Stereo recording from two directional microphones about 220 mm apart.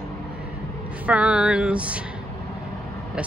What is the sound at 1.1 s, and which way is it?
Speech, 5° right (ahead or behind).